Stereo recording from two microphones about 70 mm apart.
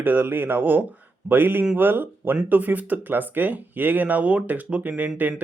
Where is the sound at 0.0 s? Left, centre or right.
Right.